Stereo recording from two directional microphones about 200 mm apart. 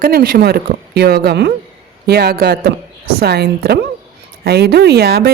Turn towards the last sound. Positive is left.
turn(degrees=-50)  # may be behind; listen again after turning